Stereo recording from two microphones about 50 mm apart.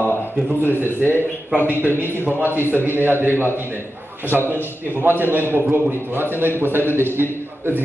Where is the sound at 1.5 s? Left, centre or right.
Right.